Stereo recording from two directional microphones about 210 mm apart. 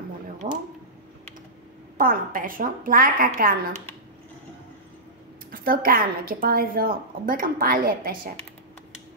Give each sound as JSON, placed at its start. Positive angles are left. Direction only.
{"t": 0.4, "sound": "a sound", "side_deg": -35}
{"t": 2.0, "sound": "a woman's voice", "side_deg": -40}
{"t": 5.5, "sound": "a woman's voice", "side_deg": -45}